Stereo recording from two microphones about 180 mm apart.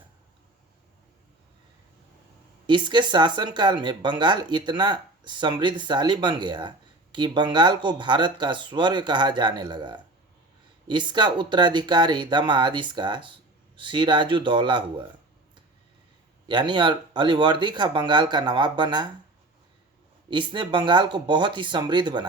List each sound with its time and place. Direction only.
2.6 s speech: 25° right (ahead or behind)
16.5 s speech: 25° right (ahead or behind)
20.3 s speech: 25° right (ahead or behind)